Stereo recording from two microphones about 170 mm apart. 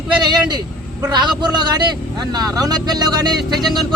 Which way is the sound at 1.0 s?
25° right (ahead or behind).